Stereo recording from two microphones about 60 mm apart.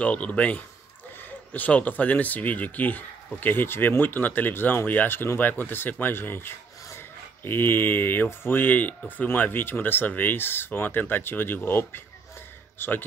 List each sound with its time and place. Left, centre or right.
0.0 s a man's voice: left